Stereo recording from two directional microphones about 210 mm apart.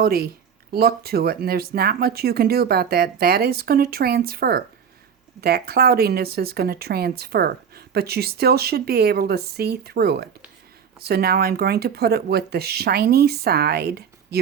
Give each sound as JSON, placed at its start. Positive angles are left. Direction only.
{"t": 0.0, "sound": "speech", "side_deg": -45}